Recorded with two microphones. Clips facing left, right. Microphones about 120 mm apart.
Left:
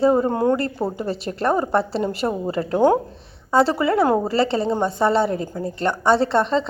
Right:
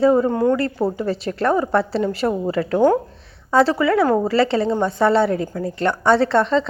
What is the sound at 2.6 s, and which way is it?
A woman's voice, 20° left (ahead or behind).